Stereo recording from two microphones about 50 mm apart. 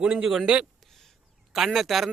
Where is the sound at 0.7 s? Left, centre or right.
Centre.